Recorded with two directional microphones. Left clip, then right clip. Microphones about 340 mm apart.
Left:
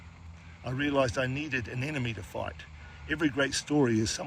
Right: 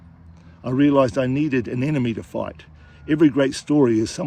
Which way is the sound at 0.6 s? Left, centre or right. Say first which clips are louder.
Right 11 dB; centre.